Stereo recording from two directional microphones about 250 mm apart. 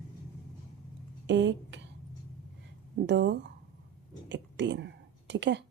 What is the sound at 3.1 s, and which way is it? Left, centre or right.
Speech, right.